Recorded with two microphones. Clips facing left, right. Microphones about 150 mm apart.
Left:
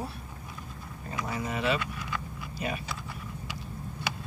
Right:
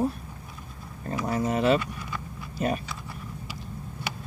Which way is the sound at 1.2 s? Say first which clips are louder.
Right 7 dB; 45° right (ahead or behind).